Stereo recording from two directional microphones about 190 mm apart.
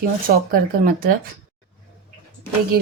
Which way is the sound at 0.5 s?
50° right (ahead or behind).